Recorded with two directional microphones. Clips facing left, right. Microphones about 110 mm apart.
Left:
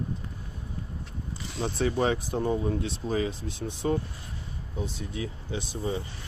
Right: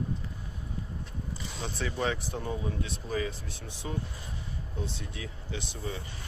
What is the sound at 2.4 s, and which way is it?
Speech, 30° left (ahead or behind).